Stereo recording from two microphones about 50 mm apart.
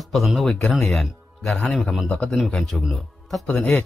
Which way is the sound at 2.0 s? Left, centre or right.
Centre.